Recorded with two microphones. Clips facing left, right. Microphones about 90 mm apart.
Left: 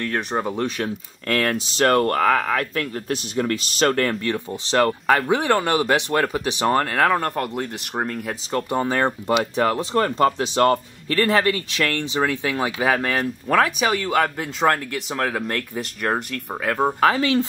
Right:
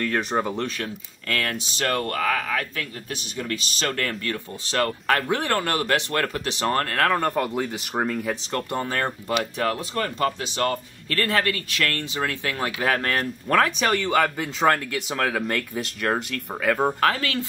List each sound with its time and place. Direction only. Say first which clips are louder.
0.0 s speech: even; centre (ahead or behind)
0.6 s speech: left 4 dB; 20° left (ahead or behind)
1.3 s speech: left 5 dB; 40° left (ahead or behind)
4.2 s speech: left 5 dB; 25° left (ahead or behind)
7.2 s speech: right 1 dB; centre (ahead or behind); by 10.8 s 40° left (ahead or behind)
11.1 s speech: left 5 dB; 25° left (ahead or behind); by 16.9 s centre (ahead or behind)
17.0 s speech: left 5 dB; 20° left (ahead or behind)